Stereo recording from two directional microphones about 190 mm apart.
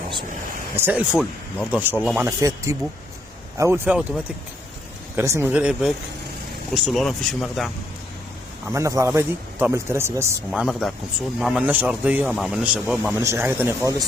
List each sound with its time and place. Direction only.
0.8 s speech: 10° right (ahead or behind)
8.7 s speech: 15° right (ahead or behind)